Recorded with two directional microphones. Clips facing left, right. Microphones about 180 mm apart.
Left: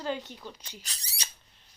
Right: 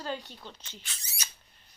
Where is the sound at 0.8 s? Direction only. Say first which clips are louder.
Left 1 dB; 35° left (ahead or behind).